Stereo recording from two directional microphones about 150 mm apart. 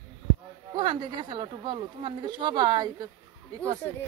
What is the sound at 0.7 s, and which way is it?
Speech, 30° right (ahead or behind).